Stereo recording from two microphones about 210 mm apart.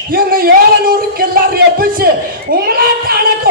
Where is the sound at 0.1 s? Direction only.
45° right (ahead or behind).